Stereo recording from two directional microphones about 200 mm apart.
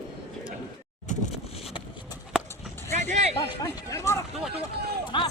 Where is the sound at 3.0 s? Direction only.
35° right (ahead or behind).